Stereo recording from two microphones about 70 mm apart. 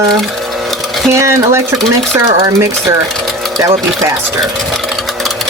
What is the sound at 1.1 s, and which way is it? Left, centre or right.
Speech, right.